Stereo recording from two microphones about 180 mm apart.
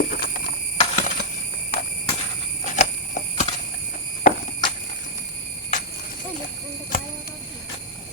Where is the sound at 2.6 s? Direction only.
40° left (ahead or behind).